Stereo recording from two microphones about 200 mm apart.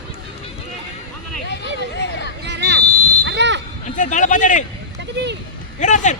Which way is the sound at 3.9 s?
40° left (ahead or behind).